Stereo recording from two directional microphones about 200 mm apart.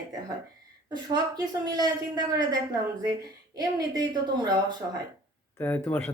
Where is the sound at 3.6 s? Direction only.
20° right (ahead or behind).